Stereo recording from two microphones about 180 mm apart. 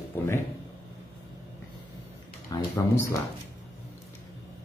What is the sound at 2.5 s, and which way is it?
Speech, 20° left (ahead or behind).